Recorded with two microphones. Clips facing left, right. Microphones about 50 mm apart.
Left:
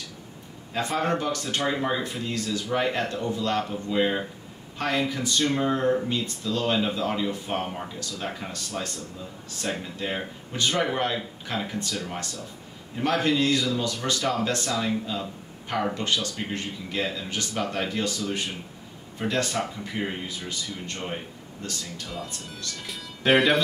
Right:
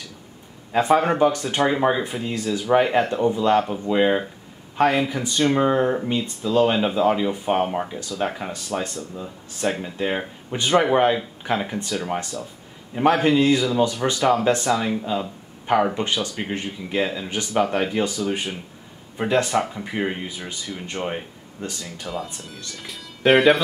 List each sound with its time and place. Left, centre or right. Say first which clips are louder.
0.7 s speech: right 8 dB; centre
9.7 s speech: right 6 dB; centre
9.9 s speech: right 6 dB; right
12.9 s speech: right 6 dB; right; by 23.6 s centre